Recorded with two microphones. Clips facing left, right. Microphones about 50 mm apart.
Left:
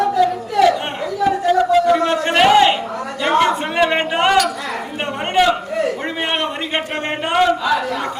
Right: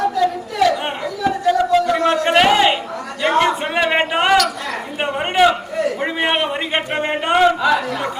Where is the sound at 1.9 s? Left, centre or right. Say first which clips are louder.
Even; centre.